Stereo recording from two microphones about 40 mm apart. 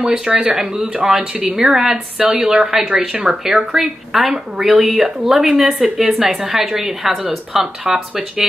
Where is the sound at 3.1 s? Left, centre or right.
Right.